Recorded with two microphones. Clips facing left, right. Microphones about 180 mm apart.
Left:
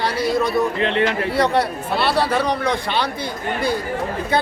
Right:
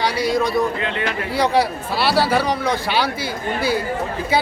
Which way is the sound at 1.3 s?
Centre (ahead or behind).